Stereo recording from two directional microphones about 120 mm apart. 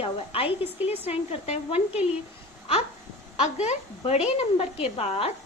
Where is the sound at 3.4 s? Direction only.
70° left (ahead or behind).